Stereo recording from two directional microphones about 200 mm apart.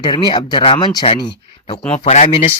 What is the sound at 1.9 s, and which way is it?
Speech, 35° left (ahead or behind).